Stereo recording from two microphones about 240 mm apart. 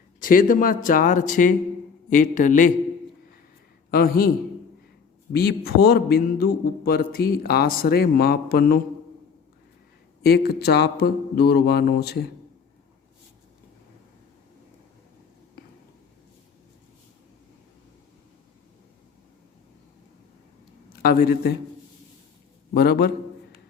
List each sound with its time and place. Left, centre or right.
0.2 s a man's voice: left
3.9 s a man's voice: left
5.3 s a man's voice: left
10.2 s a man's voice: left
21.0 s a man's voice: left
22.7 s a man's voice: left